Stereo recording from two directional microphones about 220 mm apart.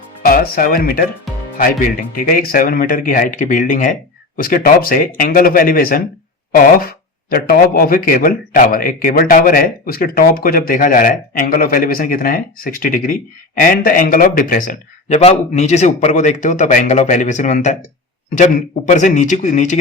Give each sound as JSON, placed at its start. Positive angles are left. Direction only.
{"t": 0.2, "sound": "speech", "side_deg": 40}